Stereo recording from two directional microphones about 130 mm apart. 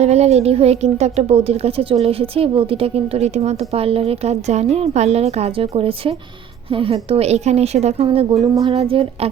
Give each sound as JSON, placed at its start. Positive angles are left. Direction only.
{"t": 0.0, "sound": "a woman's voice", "side_deg": -55}